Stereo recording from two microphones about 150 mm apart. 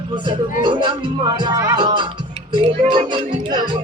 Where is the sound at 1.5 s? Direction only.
25° right (ahead or behind).